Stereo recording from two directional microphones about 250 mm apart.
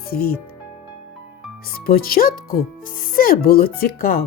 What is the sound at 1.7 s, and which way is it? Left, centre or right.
Speech, left.